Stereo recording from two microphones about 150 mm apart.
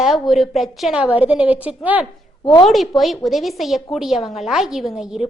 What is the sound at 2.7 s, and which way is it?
A woman's voice, centre (ahead or behind).